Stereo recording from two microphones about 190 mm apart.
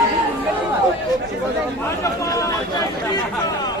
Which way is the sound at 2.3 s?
20° left (ahead or behind).